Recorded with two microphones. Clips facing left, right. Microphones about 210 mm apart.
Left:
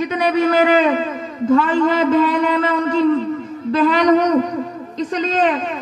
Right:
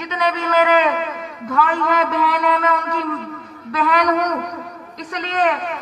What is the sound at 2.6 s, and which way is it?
A man's voice, 30° left (ahead or behind).